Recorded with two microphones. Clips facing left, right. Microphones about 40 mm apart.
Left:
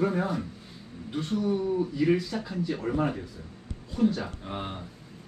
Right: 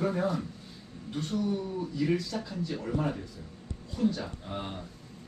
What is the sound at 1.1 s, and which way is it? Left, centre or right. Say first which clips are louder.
A man's voice: left 3 dB; centre.